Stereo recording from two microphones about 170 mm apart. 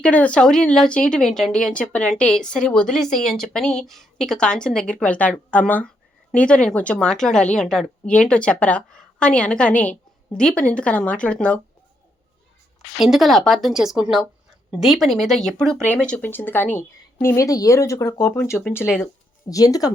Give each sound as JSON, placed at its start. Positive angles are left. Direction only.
{"t": 0.0, "sound": "a woman's voice", "side_deg": 5}
{"t": 13.0, "sound": "a woman's voice", "side_deg": 0}